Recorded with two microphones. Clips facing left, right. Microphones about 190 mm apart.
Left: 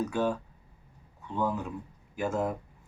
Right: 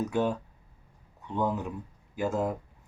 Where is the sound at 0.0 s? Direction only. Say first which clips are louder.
Right 1 dB; 20° right (ahead or behind).